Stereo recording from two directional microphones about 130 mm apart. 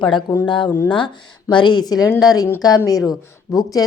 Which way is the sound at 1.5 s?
35° left (ahead or behind).